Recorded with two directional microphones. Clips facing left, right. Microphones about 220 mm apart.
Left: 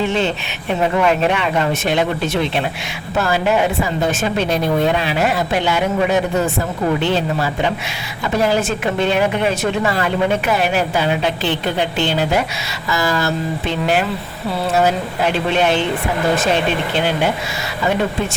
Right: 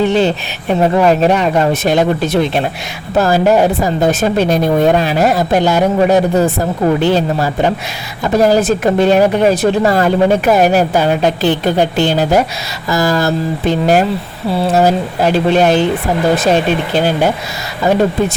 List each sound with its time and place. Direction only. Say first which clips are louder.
0.0 s a woman's voice: right 6 dB; 35° right (ahead or behind)